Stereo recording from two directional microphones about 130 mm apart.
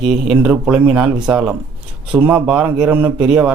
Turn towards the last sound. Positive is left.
turn(degrees=-10)  # may be behind; listen again after turning